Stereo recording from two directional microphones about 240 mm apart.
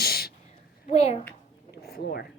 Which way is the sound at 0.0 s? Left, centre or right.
Left.